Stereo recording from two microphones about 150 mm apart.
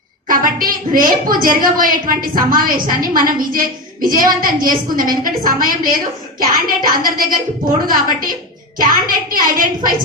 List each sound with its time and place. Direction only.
0.3 s a woman's voice: 70° right (ahead or behind)